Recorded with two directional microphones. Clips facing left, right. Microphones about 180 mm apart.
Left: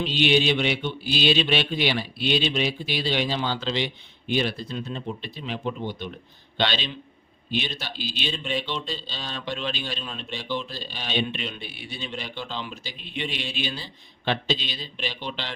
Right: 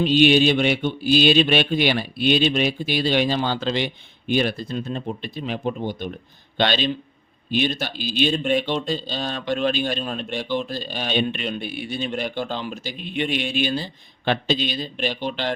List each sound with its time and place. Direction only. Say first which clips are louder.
0.0 s speech: right 6 dB; 45° right (ahead or behind)